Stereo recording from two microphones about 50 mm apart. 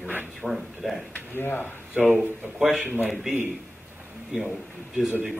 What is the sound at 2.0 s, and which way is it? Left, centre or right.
A man's voice, centre.